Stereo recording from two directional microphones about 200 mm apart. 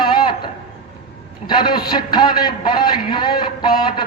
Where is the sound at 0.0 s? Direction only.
25° left (ahead or behind).